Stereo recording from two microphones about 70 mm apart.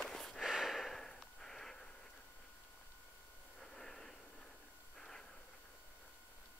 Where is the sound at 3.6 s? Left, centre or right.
Centre.